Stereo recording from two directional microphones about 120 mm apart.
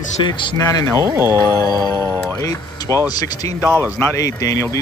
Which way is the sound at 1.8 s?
35° right (ahead or behind).